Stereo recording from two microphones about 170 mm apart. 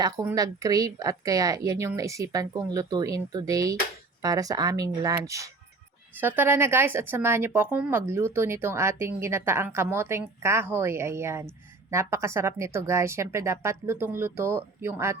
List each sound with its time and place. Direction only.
0.3 s speech: 20° right (ahead or behind)